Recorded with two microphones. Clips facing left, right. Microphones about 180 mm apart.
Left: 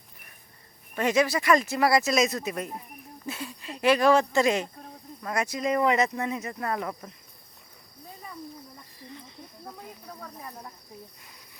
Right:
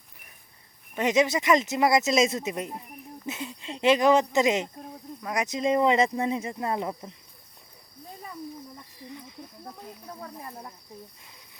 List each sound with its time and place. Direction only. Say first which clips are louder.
0.9 s speech: right 1 dB; 20° right (ahead or behind)